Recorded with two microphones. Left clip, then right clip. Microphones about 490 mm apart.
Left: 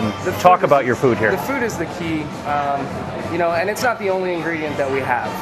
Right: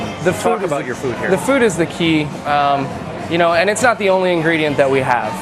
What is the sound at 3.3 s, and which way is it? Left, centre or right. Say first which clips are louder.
Speech: right 5 dB; right.